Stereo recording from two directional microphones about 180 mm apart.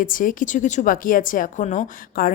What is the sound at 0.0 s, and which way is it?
Speech, 50° left (ahead or behind).